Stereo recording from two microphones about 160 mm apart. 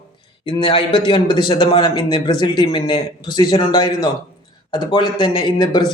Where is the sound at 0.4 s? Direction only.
35° left (ahead or behind).